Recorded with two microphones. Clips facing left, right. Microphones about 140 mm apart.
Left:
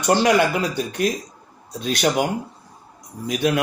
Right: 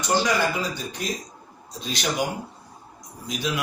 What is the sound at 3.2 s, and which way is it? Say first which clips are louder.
Speech: left 8 dB; 60° left (ahead or behind).